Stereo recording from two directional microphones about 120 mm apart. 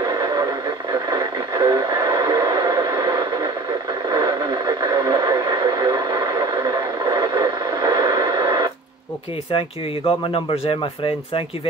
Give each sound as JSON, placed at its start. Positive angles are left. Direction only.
{"t": 1.1, "sound": "radio", "side_deg": -35}
{"t": 9.5, "sound": "speech", "side_deg": 50}